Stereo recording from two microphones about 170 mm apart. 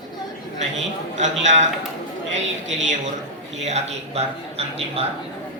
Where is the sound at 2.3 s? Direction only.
45° right (ahead or behind).